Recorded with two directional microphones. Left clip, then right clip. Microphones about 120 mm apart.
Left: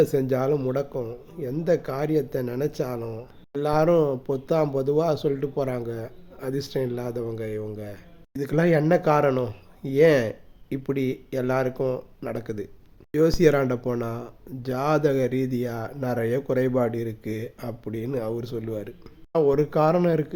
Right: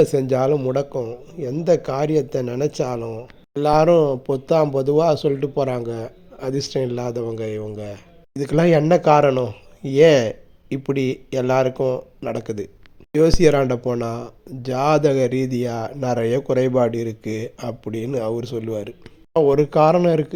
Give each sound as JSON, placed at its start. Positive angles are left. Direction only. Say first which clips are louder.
{"t": 0.0, "sound": "speech", "louder": "right 5 dB", "side_deg": -15}
{"t": 9.9, "sound": "speech", "louder": "right 5 dB", "side_deg": -25}